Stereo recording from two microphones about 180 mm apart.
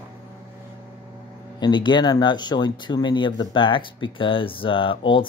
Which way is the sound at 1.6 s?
25° left (ahead or behind).